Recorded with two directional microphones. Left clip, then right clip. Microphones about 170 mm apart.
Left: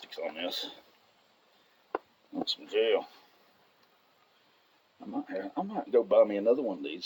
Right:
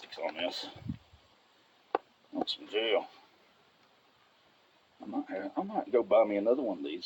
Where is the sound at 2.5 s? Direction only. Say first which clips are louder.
Left 4 dB; 35° left (ahead or behind).